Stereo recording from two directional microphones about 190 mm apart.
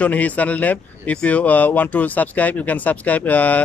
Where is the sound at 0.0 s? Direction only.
10° left (ahead or behind).